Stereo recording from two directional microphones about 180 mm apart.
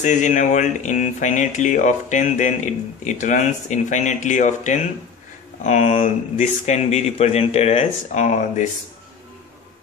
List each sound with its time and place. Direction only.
0.0 s speech: 40° left (ahead or behind)